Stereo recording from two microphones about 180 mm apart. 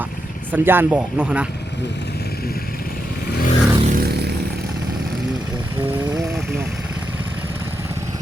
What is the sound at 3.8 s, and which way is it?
Vehicle, 55° right (ahead or behind).